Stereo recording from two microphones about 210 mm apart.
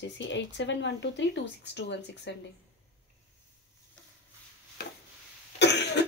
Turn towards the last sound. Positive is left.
turn(degrees=55)  # may be behind; listen again after turning